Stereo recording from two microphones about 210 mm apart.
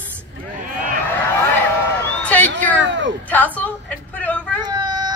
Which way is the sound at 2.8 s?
60° right (ahead or behind).